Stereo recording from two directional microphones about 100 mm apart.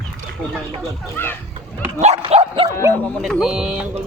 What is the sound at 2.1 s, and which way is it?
Dog, 80° right.